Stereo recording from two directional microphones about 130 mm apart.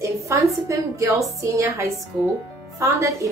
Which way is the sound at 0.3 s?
20° right (ahead or behind).